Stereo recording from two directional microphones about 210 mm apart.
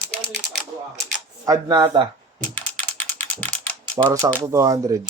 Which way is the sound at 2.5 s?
5° left (ahead or behind).